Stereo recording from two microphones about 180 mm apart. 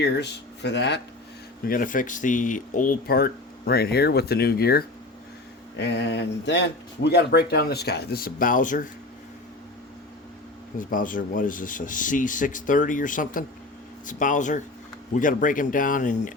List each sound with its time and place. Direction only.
0.0 s speech: 70° left (ahead or behind)
1.6 s speech: 50° left (ahead or behind)
5.8 s speech: 70° left (ahead or behind); by 8.9 s 45° left (ahead or behind)
10.8 s speech: 50° left (ahead or behind)